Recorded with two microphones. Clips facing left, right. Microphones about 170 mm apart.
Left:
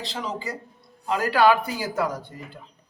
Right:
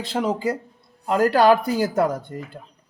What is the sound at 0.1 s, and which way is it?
Speech, 55° right (ahead or behind).